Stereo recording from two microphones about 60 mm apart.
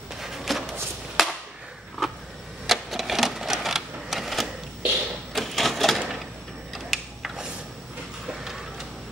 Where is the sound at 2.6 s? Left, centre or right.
Centre.